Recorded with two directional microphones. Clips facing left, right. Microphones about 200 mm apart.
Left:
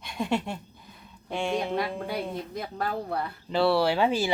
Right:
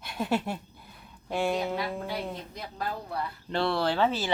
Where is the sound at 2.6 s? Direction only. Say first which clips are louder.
Left 5 dB; 50° left (ahead or behind).